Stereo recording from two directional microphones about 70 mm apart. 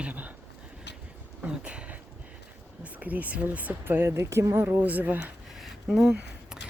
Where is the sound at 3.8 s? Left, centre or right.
Right.